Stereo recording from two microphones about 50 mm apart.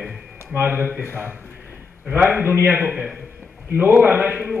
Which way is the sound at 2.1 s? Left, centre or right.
Right.